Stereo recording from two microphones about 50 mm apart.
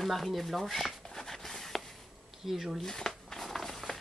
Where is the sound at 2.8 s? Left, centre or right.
Centre.